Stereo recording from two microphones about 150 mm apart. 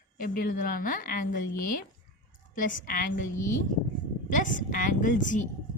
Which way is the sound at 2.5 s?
60° left (ahead or behind).